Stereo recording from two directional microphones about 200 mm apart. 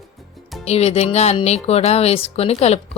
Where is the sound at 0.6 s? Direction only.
30° left (ahead or behind).